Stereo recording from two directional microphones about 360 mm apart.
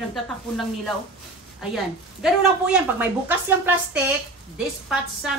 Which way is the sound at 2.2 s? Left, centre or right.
Centre.